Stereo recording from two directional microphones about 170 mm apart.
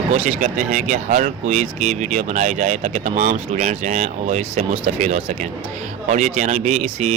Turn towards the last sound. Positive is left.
turn(degrees=-45)  # may be behind; listen again after turning